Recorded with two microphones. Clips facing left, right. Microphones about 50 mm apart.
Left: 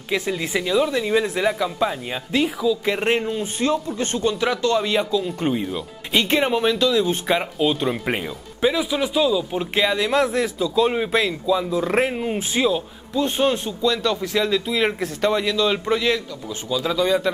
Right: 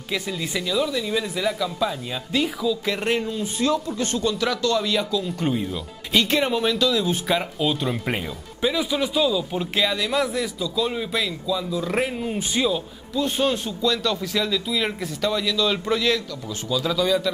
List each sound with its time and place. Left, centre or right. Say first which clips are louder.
0.1 s speech: left 4 dB; left
2.4 s speech: left 4 dB; centre
2.8 s speech: left 3 dB; left
7.5 s speech: left 3 dB; centre
9.8 s speech: left 4 dB; left
15.7 s speech: left 2 dB; left